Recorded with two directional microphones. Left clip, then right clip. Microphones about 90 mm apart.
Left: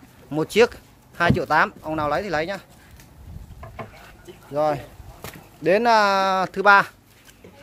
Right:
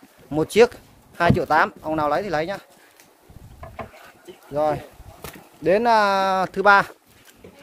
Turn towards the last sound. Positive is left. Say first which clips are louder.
# even
turn(degrees=-20)  # may be behind; listen again after turning